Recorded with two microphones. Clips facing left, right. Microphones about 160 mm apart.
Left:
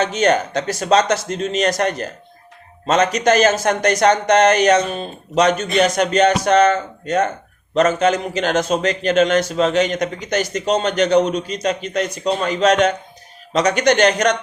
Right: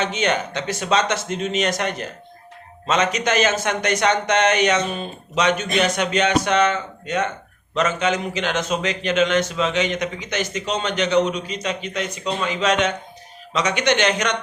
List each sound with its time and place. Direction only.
0.0 s a man's voice: 40° left (ahead or behind)